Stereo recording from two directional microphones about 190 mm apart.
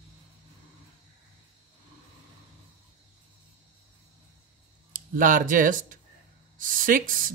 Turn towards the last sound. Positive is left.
turn(degrees=-45)  # may be behind; listen again after turning